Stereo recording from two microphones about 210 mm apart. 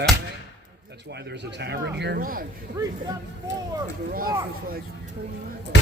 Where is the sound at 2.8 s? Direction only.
15° right (ahead or behind).